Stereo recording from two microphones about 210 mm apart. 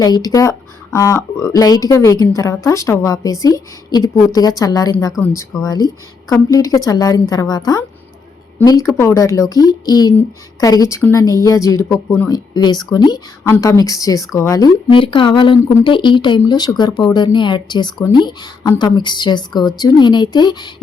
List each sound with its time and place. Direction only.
0.0 s a woman's voice: 15° left (ahead or behind)